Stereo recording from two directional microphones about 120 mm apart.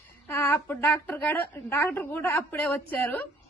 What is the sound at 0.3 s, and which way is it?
A woman's voice, 15° left (ahead or behind).